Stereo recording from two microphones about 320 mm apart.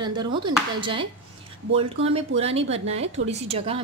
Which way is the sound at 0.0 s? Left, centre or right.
Centre.